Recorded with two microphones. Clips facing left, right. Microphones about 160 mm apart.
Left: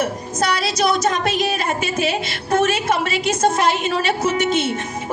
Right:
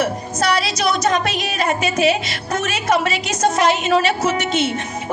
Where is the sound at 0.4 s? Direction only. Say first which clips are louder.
Even; 50° left (ahead or behind).